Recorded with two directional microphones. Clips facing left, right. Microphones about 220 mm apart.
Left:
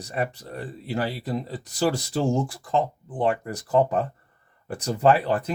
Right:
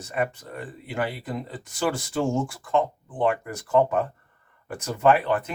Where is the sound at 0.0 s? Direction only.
35° left (ahead or behind).